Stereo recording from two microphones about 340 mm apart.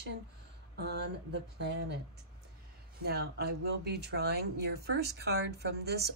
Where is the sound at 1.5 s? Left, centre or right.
Right.